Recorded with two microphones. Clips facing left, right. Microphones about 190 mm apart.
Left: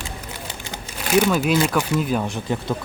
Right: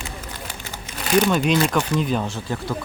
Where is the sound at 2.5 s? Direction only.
20° left (ahead or behind).